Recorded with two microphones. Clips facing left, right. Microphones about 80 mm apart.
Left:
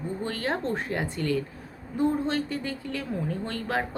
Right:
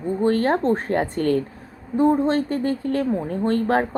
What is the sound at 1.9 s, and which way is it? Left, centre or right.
Speech, right.